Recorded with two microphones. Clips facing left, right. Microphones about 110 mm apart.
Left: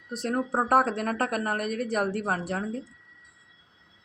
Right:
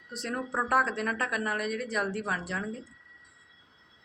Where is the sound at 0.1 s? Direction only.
45° left (ahead or behind).